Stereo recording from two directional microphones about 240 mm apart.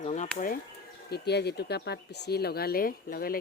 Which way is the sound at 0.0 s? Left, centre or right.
Left.